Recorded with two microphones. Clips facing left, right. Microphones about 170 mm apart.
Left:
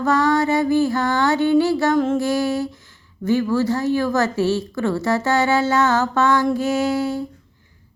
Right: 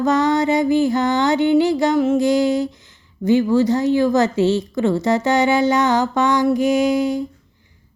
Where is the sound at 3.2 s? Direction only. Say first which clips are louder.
Right 4 dB; 20° right (ahead or behind).